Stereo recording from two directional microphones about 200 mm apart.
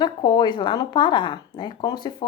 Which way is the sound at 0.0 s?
20° left (ahead or behind).